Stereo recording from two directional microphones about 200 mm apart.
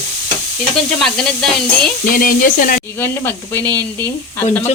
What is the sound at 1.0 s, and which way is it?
Speech, 5° left (ahead or behind).